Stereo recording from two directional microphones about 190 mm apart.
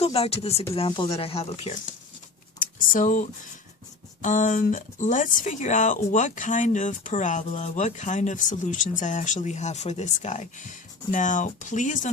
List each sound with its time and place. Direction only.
0.0 s speech: 30° left (ahead or behind)
2.6 s speech: 45° left (ahead or behind)